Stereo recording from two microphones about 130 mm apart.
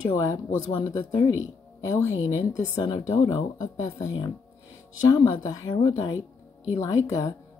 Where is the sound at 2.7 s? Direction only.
30° left (ahead or behind).